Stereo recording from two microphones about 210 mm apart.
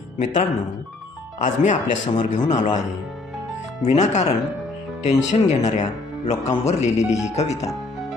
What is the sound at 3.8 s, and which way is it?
Music, 35° left (ahead or behind).